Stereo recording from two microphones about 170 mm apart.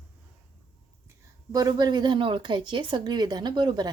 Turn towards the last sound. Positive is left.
turn(degrees=-25)  # may be behind; listen again after turning